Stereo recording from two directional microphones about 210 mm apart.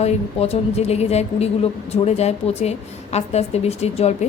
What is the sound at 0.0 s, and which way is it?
A woman's voice, 30° left (ahead or behind).